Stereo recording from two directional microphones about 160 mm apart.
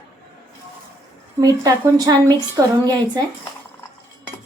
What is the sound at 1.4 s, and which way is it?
A woman's voice, 25° right (ahead or behind).